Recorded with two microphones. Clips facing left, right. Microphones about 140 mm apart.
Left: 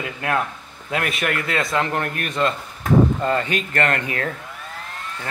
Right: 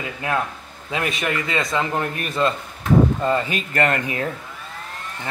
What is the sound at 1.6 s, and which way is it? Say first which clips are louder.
Speech: left 1 dB; centre (ahead or behind).